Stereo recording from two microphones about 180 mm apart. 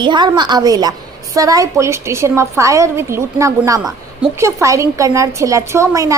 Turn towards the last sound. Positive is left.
turn(degrees=-15)  # may be behind; listen again after turning